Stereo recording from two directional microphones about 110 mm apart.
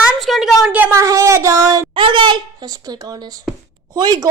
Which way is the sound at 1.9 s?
50° right (ahead or behind).